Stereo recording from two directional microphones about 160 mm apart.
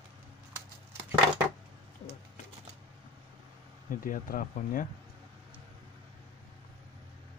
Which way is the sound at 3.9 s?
60° left (ahead or behind).